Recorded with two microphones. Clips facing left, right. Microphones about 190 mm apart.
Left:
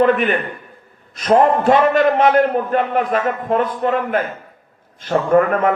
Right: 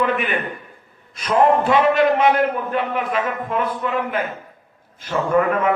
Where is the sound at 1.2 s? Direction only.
45° left (ahead or behind).